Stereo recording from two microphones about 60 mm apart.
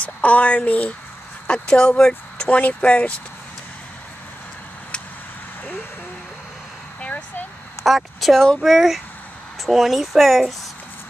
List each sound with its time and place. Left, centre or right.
0.0 s speech: left
7.0 s a sound: left
7.8 s speech: centre